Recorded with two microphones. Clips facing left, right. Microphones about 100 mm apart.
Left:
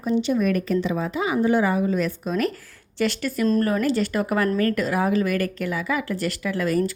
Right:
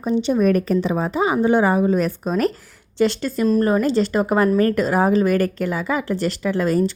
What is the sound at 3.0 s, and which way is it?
A woman's voice, 25° right (ahead or behind).